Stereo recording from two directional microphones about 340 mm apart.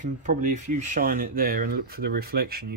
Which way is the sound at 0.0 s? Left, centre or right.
Right.